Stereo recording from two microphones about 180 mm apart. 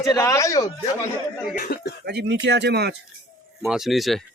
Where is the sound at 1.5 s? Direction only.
60° left (ahead or behind).